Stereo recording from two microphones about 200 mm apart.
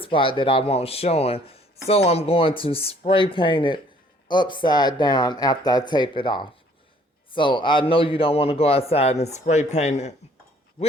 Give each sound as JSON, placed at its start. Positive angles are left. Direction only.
{"t": 0.0, "sound": "a man's voice", "side_deg": 25}